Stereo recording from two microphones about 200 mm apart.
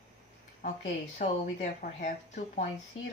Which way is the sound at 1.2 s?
35° left (ahead or behind).